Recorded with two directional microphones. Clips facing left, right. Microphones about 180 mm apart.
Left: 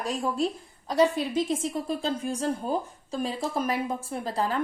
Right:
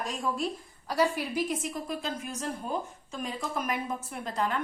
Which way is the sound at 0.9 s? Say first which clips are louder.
Left 5 dB; 20° left (ahead or behind).